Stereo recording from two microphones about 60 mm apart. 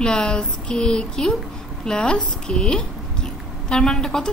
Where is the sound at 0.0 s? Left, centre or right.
Centre.